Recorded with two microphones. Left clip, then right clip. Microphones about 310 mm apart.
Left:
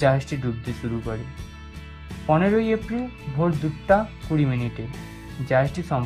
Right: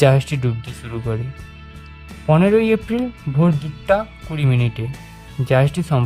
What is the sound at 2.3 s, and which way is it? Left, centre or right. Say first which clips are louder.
Speech: right 5 dB; right.